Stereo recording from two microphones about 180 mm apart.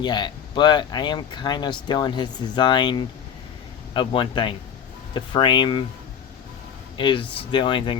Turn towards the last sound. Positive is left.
turn(degrees=25)  # may be behind; listen again after turning